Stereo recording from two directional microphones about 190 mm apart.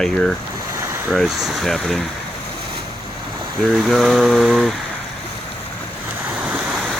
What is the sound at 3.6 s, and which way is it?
Speech, centre (ahead or behind).